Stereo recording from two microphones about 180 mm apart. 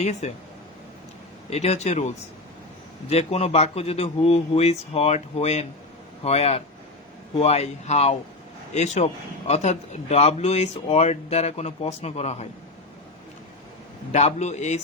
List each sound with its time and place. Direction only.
0.0 s speech: 40° left (ahead or behind)
1.5 s speech: 35° left (ahead or behind)
14.1 s speech: 40° left (ahead or behind)